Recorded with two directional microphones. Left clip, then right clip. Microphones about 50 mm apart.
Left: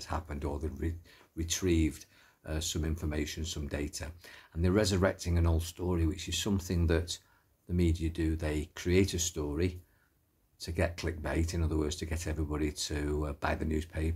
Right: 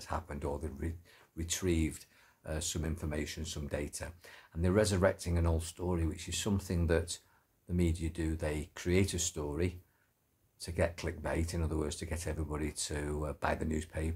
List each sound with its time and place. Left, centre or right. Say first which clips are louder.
0.0 s speech: left 1 dB; right
1.4 s speech: left 4 dB; right
13.4 s speech: right 2 dB; right